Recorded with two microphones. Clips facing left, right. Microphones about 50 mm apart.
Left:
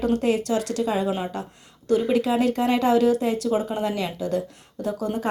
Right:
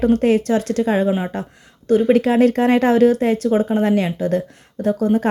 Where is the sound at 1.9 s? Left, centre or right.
Right.